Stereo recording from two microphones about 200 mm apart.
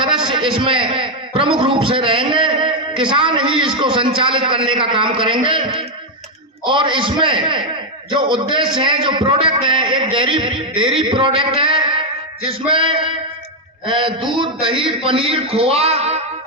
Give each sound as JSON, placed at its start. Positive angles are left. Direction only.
{"t": 0.0, "sound": "a man's voice", "side_deg": -25}